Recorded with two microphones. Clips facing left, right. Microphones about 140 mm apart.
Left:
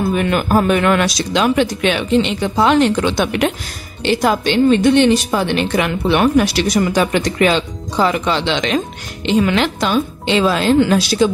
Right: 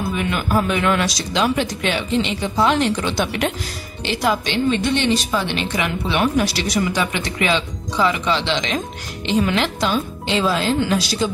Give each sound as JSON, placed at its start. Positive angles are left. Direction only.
{"t": 0.1, "sound": "speech", "side_deg": 50}
{"t": 4.1, "sound": "a woman's voice", "side_deg": 50}
{"t": 9.6, "sound": "speech", "side_deg": 75}